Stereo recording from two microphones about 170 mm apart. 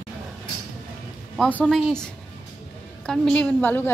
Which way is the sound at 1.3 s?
5° left (ahead or behind).